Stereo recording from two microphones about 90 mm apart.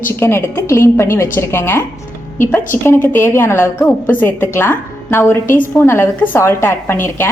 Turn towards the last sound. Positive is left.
turn(degrees=30)  # may be behind; listen again after turning